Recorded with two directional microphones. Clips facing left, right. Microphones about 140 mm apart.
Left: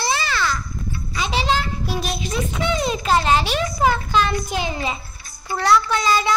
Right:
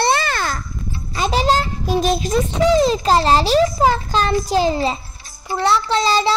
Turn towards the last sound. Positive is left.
turn(degrees=-30)  # may be behind; listen again after turning